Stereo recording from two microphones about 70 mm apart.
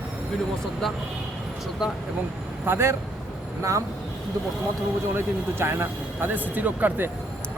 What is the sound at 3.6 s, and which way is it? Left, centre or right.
Speech, right.